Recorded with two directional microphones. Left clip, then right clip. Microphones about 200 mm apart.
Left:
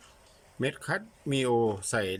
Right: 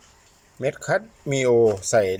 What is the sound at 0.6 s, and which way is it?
Speech, centre (ahead or behind).